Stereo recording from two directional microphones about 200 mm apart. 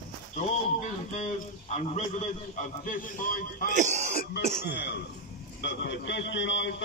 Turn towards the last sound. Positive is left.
turn(degrees=65)  # may be behind; listen again after turning